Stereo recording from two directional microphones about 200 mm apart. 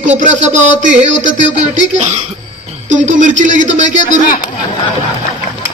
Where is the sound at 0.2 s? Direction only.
35° right (ahead or behind).